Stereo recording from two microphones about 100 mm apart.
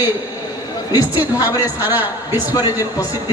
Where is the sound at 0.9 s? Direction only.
35° left (ahead or behind).